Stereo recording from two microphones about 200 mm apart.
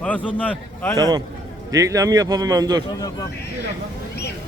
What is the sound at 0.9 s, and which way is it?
Speech, 20° right (ahead or behind).